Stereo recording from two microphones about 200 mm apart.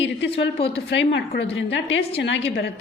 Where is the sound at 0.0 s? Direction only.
60° left (ahead or behind).